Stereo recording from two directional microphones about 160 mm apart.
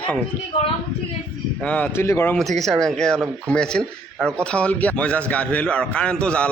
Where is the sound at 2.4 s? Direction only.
Centre (ahead or behind).